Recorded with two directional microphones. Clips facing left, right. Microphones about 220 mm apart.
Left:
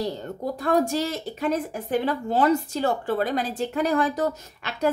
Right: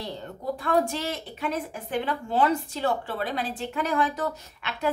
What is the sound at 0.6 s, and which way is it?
Speech, 40° left (ahead or behind).